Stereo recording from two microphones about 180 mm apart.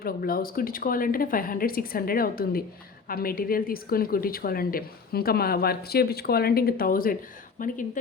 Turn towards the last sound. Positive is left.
turn(degrees=50)  # may be behind; listen again after turning